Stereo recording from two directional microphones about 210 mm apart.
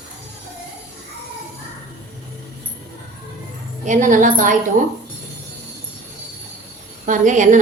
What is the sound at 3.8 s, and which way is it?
Speech, 40° right (ahead or behind).